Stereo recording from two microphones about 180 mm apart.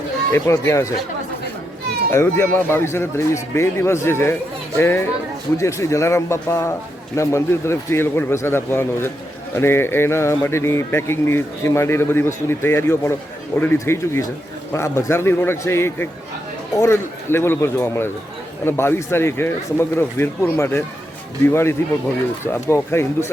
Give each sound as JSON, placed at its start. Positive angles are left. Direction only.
{"t": 0.3, "sound": "a man's voice", "side_deg": 15}
{"t": 2.1, "sound": "a man's voice", "side_deg": 10}